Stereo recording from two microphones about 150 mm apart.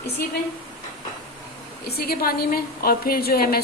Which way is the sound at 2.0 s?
90° left.